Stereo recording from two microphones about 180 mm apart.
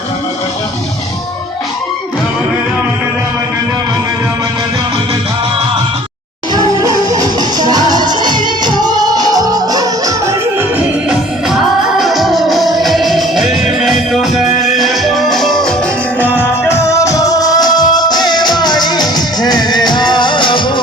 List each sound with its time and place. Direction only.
6.5 s music: 20° right (ahead or behind)
10.6 s music: 10° right (ahead or behind); by 20.6 s 25° left (ahead or behind)